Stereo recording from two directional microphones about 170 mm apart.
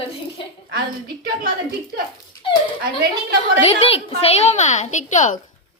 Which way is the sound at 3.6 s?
35° left (ahead or behind).